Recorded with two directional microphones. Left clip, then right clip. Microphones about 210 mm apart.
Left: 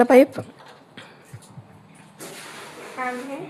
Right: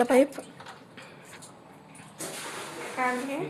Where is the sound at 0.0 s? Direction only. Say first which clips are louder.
Left 8 dB; 25° left (ahead or behind).